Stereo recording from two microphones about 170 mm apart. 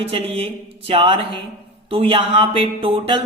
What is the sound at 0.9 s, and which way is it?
Speech, 30° right (ahead or behind).